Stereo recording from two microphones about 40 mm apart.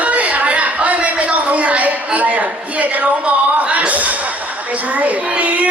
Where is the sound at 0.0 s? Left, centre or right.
Right.